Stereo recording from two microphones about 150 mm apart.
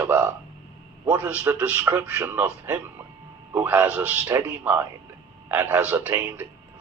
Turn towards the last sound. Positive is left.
turn(degrees=-10)  # may be behind; listen again after turning